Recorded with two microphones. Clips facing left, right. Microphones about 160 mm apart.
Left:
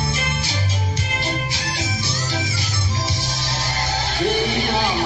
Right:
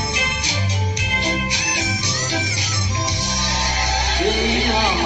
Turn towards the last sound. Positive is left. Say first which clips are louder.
# right 1 dB
turn(degrees=-15)  # may be behind; listen again after turning